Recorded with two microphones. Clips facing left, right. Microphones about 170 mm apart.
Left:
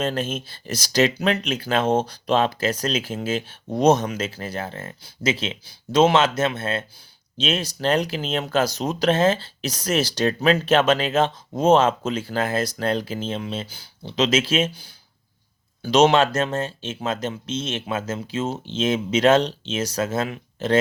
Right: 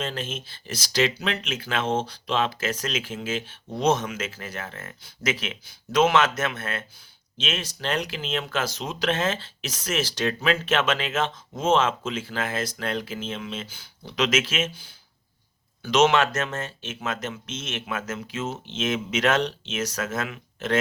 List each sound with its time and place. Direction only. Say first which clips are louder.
0.0 s speech: left 6 dB; 45° left (ahead or behind)